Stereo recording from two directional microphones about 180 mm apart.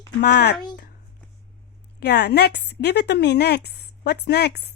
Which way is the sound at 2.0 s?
65° left (ahead or behind).